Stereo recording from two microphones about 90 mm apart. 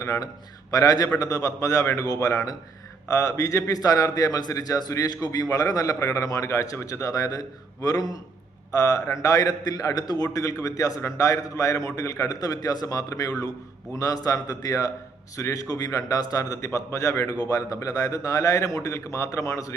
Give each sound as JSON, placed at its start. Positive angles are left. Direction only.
{"t": 0.0, "sound": "a man's voice", "side_deg": 40}